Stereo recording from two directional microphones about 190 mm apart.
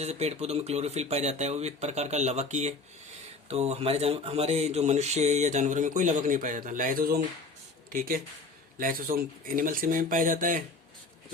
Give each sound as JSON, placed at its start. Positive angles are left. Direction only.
{"t": 0.0, "sound": "speech", "side_deg": -35}